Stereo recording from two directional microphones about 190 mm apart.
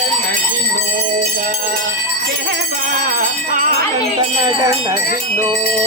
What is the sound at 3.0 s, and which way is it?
Music, 45° right (ahead or behind).